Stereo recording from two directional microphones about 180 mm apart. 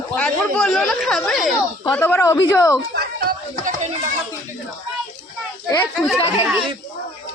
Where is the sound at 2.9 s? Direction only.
60° right (ahead or behind).